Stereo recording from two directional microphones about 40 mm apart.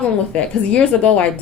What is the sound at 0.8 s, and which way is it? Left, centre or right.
Speech, left.